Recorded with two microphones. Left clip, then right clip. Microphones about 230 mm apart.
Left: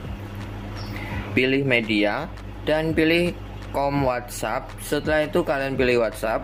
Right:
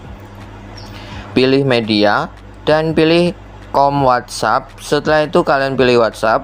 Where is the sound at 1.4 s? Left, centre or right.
Right.